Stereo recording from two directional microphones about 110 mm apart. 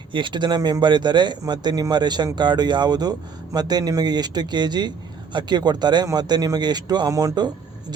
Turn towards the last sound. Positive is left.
turn(degrees=-30)  # may be behind; listen again after turning